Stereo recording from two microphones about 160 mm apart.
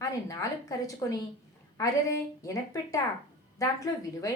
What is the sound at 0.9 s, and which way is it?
A woman's voice, 20° left (ahead or behind).